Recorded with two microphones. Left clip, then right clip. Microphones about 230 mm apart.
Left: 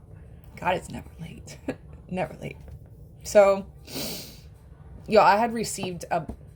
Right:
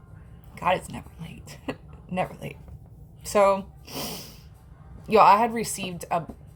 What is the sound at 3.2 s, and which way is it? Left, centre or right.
Speech, centre.